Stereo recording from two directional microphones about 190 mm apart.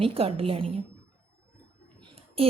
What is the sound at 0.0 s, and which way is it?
Speech, 30° right (ahead or behind).